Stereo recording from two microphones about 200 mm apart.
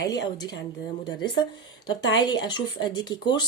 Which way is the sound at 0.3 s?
20° left (ahead or behind).